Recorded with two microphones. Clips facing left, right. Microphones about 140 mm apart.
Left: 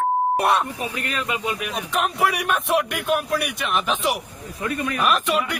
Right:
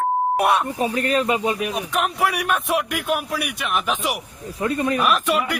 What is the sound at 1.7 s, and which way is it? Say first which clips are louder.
Speech: right 1 dB; centre (ahead or behind).